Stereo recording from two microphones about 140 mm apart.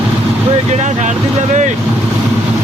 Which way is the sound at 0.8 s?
60° right (ahead or behind).